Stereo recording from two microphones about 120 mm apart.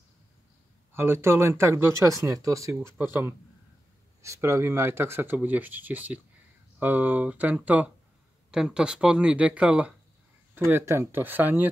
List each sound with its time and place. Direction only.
0.9 s speech: 20° right (ahead or behind)
3.0 s speech: 15° right (ahead or behind)
10.7 s speech: 20° right (ahead or behind)